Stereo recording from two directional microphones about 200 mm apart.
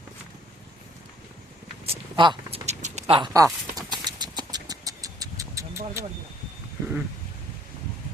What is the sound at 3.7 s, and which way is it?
Vehicle, 20° right (ahead or behind).